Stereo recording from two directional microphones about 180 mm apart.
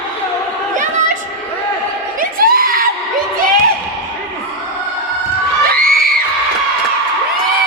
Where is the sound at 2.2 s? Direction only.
55° right (ahead or behind).